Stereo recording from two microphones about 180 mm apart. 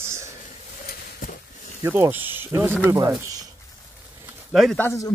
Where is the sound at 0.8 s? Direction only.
55° left (ahead or behind).